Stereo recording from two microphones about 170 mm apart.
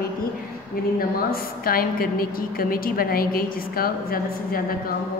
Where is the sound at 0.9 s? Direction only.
60° left (ahead or behind).